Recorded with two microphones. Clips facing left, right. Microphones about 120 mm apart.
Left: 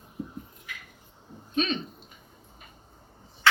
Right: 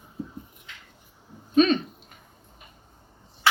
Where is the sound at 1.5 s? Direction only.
50° right (ahead or behind).